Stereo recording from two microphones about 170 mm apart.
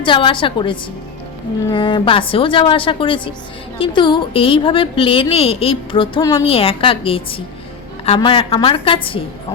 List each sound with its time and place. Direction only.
0.0 s a woman's voice: 30° left (ahead or behind)
6.4 s a woman's voice: 35° left (ahead or behind)